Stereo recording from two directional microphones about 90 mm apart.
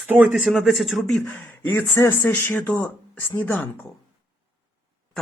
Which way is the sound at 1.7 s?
30° left (ahead or behind).